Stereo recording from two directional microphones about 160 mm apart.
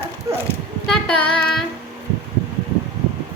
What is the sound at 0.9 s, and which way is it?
Child singing, 5° left (ahead or behind).